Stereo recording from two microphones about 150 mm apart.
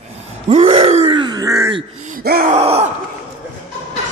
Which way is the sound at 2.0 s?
75° right (ahead or behind).